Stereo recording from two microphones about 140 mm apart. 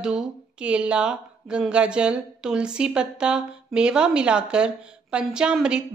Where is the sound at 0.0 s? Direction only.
5° right (ahead or behind).